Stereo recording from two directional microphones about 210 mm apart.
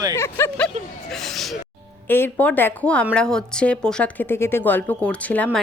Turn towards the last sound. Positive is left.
turn(degrees=5)  # may be behind; listen again after turning